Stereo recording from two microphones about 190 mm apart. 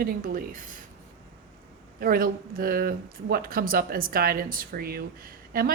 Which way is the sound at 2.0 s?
50° right (ahead or behind).